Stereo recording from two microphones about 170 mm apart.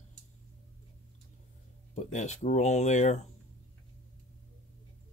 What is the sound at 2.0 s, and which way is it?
Speech, 45° left (ahead or behind).